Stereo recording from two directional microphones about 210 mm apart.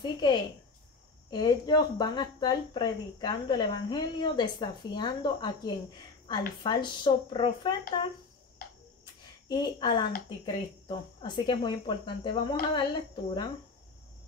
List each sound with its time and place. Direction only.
0.0 s a woman's voice: 20° left (ahead or behind)
6.6 s a woman's voice: 20° left (ahead or behind)
9.0 s a sound: 20° left (ahead or behind)
10.4 s a woman's voice: 20° left (ahead or behind)